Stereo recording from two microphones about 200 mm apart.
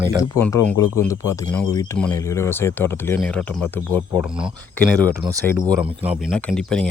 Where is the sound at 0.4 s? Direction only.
10° left (ahead or behind).